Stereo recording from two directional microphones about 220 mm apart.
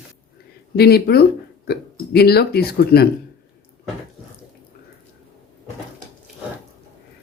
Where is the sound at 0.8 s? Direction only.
45° left (ahead or behind).